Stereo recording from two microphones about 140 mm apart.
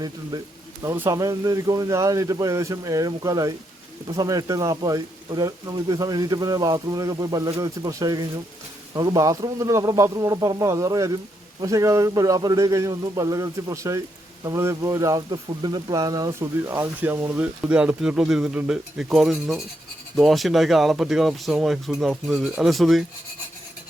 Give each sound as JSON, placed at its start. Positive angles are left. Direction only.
{"t": 0.0, "sound": "speech", "side_deg": -30}